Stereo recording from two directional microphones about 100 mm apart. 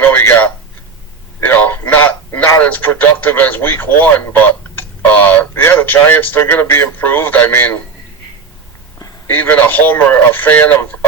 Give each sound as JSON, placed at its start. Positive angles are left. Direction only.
{"t": 0.0, "sound": "radio", "side_deg": 20}
{"t": 1.4, "sound": "speech", "side_deg": 20}
{"t": 9.2, "sound": "speech", "side_deg": 20}